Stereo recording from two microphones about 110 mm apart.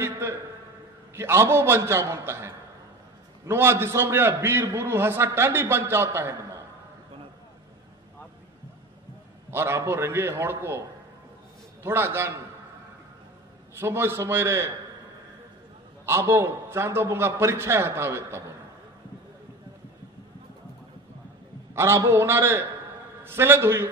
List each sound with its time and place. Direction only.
0.0 s a sound: 25° right (ahead or behind)
1.1 s a man's voice: 25° right (ahead or behind)
9.5 s a man's voice: 25° right (ahead or behind)
13.7 s a man's voice: 20° right (ahead or behind)
16.1 s a man's voice: 25° right (ahead or behind)
21.7 s a man's voice: 25° right (ahead or behind)